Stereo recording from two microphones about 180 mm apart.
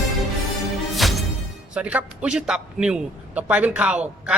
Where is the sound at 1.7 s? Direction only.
5° right (ahead or behind).